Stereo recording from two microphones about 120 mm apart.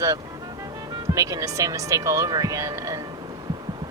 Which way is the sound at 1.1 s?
30° right (ahead or behind).